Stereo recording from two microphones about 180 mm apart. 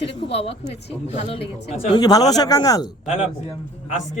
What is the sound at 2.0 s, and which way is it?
Speech, 20° left (ahead or behind).